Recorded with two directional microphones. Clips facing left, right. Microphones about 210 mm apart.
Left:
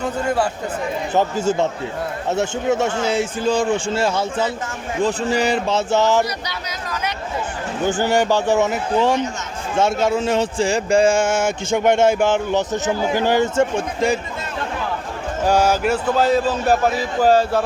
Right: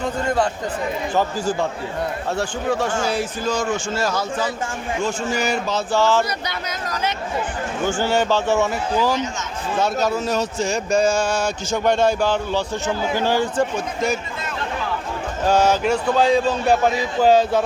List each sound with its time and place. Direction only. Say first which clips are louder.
1.1 s speech: left 4 dB; 25° left (ahead or behind)
6.2 s speech: right 1 dB; 50° right (ahead or behind)
7.9 s speech: left 2 dB; 15° left (ahead or behind)
15.4 s speech: even; 10° left (ahead or behind)